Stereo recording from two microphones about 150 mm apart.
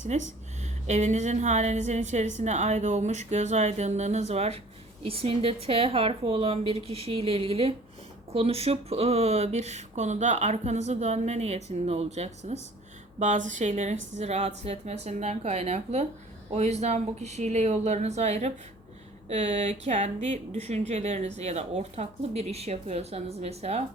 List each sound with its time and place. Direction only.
0.1 s a woman's voice: 50° right (ahead or behind)